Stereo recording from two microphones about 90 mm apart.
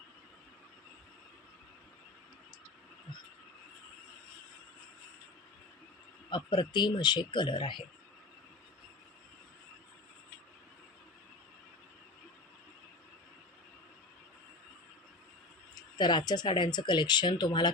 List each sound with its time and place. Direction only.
6.3 s speech: 55° left (ahead or behind)
16.0 s speech: 55° left (ahead or behind)